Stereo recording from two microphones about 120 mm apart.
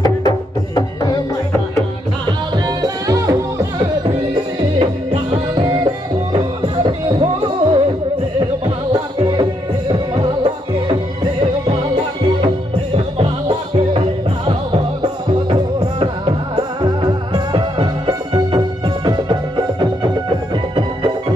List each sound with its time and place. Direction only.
0.7 s music: 35° left (ahead or behind)
2.8 s music: 30° right (ahead or behind)
4.7 s music: 55° right (ahead or behind)
7.2 s music: 45° right (ahead or behind)
11.6 s music: 50° right (ahead or behind)